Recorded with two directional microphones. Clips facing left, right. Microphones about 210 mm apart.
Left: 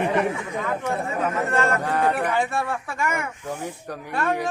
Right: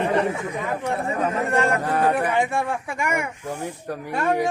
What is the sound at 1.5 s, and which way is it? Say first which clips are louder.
A man's voice: right 2 dB; 15° right (ahead or behind).